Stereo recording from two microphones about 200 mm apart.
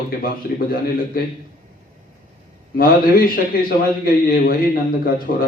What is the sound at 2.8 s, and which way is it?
Speech, 45° left (ahead or behind).